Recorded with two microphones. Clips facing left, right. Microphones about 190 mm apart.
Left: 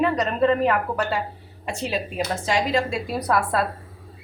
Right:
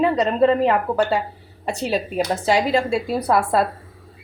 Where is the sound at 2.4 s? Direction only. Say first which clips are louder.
Right 3 dB; 35° right (ahead or behind).